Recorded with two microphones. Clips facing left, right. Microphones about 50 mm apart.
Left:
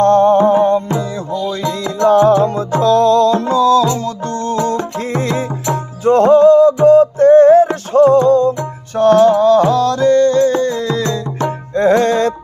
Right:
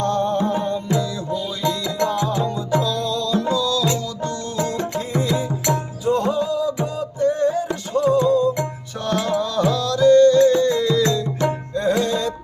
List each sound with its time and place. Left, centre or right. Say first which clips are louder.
0.0 s music: left 11 dB; left
1.4 s music: left 5 dB; left
7.9 s music: left 8 dB; left
9.0 s music: left 13 dB; left
11.7 s music: left 11 dB; left